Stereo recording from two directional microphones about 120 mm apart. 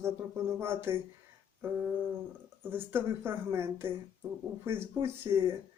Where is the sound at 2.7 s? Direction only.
20° right (ahead or behind).